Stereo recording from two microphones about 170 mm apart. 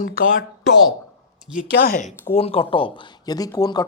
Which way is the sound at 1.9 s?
50° left (ahead or behind).